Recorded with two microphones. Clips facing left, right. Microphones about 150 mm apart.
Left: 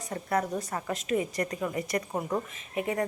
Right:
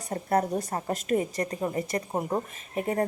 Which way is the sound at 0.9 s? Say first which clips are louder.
Right 2 dB; 45° right (ahead or behind).